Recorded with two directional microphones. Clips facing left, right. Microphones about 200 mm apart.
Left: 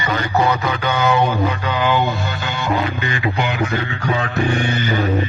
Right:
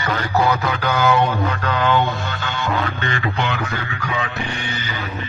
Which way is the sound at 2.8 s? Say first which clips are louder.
Left 2 dB; 15° left (ahead or behind).